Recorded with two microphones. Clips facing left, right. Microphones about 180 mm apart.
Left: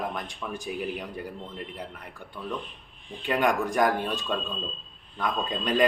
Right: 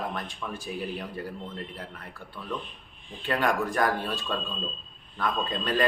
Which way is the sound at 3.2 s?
15° left (ahead or behind).